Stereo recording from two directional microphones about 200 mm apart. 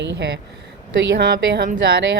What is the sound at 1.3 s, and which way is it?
Speech, 50° right (ahead or behind).